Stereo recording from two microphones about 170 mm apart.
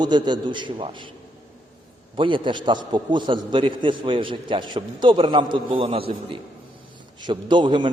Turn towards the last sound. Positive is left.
turn(degrees=-30)  # may be behind; listen again after turning